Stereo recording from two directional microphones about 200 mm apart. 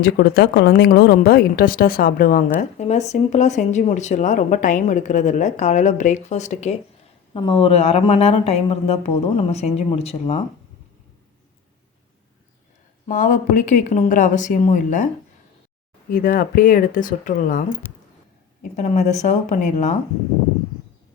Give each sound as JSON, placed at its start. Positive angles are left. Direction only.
{"t": 0.0, "sound": "a woman's voice", "side_deg": 50}
{"t": 13.1, "sound": "a woman's voice", "side_deg": 40}
{"t": 18.8, "sound": "a woman's voice", "side_deg": 35}